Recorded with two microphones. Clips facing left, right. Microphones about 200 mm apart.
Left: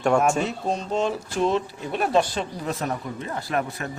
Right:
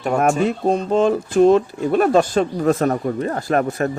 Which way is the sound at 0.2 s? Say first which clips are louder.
Right 5 dB; 55° right (ahead or behind).